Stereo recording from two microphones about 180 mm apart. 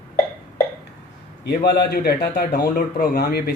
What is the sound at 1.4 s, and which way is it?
Speech, 65° left (ahead or behind).